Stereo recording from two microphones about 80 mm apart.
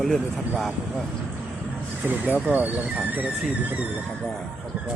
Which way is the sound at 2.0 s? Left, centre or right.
Right.